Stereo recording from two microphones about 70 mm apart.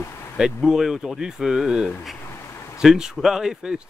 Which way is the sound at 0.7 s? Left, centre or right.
Centre.